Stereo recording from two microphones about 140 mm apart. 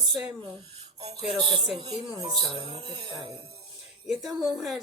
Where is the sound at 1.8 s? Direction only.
40° right (ahead or behind).